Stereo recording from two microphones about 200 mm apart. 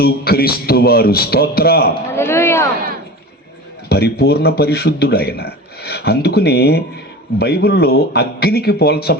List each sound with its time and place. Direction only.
0.0 s a man's voice: 50° left (ahead or behind)
2.1 s speech: 10° left (ahead or behind)
3.8 s a man's voice: 55° left (ahead or behind)